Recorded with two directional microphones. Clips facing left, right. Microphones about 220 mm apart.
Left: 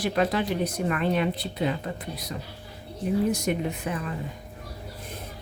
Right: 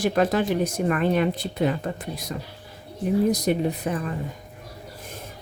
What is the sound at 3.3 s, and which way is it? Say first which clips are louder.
Speech: right 4 dB; 35° right (ahead or behind).